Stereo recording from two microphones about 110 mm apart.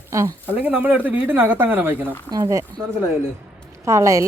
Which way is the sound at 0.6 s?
15° right (ahead or behind).